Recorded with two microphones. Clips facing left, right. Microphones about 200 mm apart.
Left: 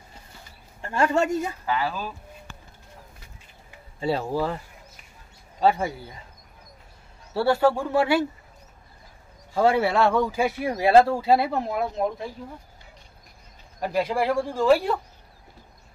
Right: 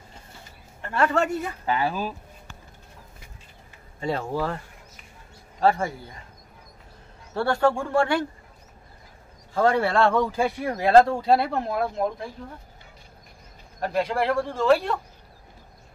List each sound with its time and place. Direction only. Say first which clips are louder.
0.8 s a man's voice: left 1 dB; 15° left (ahead or behind)
1.7 s speech: right 4 dB; 25° right (ahead or behind)
4.0 s speech: left 2 dB; 5° left (ahead or behind)
5.6 s speech: even; centre (ahead or behind)
7.3 s a man's voice: left 2 dB; 5° left (ahead or behind)
9.5 s speech: left 1 dB; 10° left (ahead or behind)
13.7 s speech: even; 5° left (ahead or behind)